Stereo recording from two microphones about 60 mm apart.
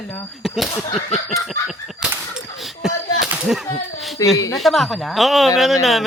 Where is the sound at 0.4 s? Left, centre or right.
Centre.